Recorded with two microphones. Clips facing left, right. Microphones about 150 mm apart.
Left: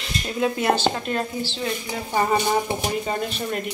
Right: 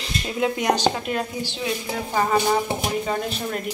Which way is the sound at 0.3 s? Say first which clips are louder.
Even; 15° right (ahead or behind).